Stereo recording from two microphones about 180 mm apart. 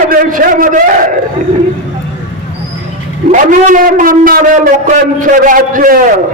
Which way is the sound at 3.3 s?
45° right (ahead or behind).